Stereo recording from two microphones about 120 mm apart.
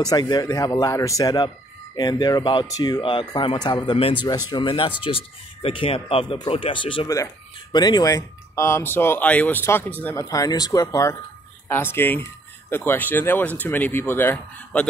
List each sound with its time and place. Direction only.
0.0 s speech: 35° left (ahead or behind)
7.7 s speech: 35° left (ahead or behind); by 10.2 s 15° left (ahead or behind)
10.2 s speech: 30° left (ahead or behind)
11.7 s speech: 20° left (ahead or behind)